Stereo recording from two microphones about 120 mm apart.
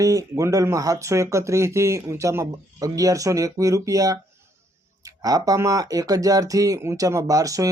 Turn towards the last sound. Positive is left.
turn(degrees=-30)  # may be behind; listen again after turning